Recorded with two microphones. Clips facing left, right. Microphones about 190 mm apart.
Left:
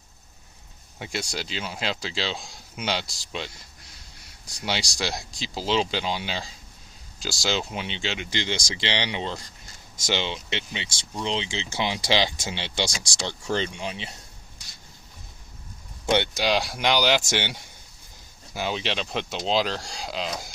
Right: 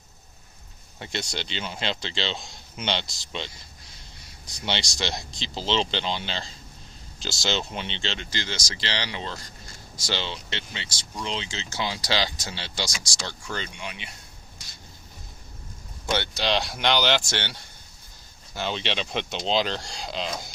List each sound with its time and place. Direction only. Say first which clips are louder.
0.9 s speech: left 1 dB; 10° left (ahead or behind)
8.3 s speech: left 4 dB; 20° left (ahead or behind)
16.0 s speech: left 3 dB; 20° left (ahead or behind)
17.2 s speech: left 4 dB; 15° left (ahead or behind)